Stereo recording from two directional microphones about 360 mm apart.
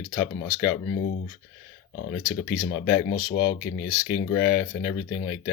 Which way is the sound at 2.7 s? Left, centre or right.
Left.